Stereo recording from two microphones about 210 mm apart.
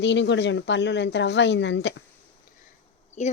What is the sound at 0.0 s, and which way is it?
A woman's voice, 55° left (ahead or behind).